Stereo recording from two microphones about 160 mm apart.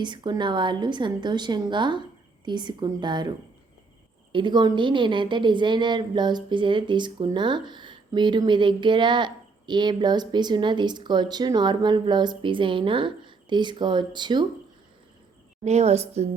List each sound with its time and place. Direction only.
0.0 s a woman's voice: 30° right (ahead or behind)
15.6 s a woman's voice: 45° right (ahead or behind)